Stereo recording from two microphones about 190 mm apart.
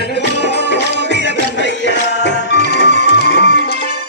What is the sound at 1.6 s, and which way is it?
Music, 70° left (ahead or behind).